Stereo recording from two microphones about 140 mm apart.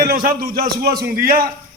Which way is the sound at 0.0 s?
90° right.